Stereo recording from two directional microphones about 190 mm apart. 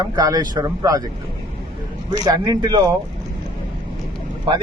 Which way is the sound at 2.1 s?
20° right (ahead or behind).